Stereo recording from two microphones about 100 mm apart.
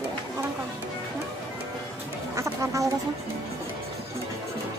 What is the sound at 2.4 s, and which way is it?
Speech, 30° right (ahead or behind).